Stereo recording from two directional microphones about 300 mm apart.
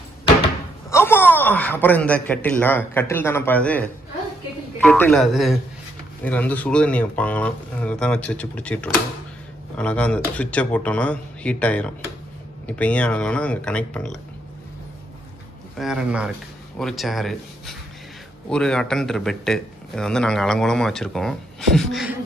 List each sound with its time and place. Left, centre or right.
0.8 s a man's voice: centre
15.8 s a man's voice: centre